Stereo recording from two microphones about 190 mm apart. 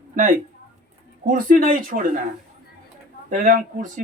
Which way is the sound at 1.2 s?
45° right (ahead or behind).